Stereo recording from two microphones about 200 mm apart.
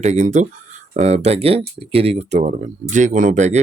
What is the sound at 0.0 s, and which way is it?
Speech, 35° right (ahead or behind).